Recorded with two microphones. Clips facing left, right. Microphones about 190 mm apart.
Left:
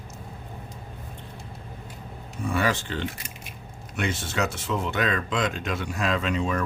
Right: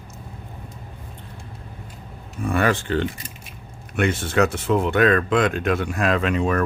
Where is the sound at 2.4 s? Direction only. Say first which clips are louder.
Right 5 dB; 55° right (ahead or behind).